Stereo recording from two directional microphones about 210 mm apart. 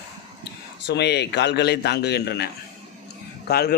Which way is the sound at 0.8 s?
50° left (ahead or behind).